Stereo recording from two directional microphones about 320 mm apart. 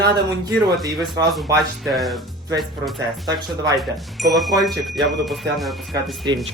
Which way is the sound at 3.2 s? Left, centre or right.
Centre.